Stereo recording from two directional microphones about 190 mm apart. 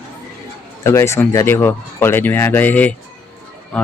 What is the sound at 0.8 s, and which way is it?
Speech, 15° left (ahead or behind).